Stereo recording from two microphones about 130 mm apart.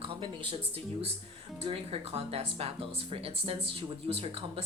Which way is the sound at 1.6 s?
50° right (ahead or behind).